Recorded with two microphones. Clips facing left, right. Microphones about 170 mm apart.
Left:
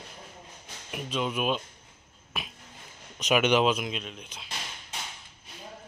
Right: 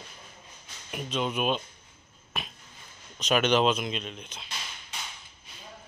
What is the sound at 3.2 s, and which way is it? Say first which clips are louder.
Speech: even; 15° left (ahead or behind).